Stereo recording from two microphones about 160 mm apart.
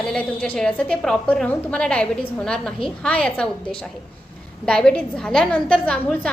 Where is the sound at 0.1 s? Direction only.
5° left (ahead or behind).